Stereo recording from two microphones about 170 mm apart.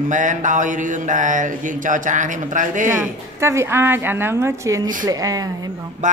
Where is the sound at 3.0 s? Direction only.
15° right (ahead or behind).